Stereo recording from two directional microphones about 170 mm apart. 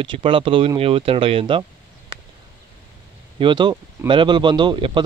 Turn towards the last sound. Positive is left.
turn(degrees=-30)  # may be behind; listen again after turning